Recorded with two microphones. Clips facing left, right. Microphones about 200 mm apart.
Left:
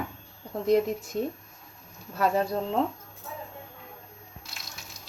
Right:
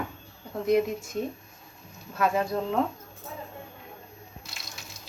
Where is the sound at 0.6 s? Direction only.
35° left (ahead or behind).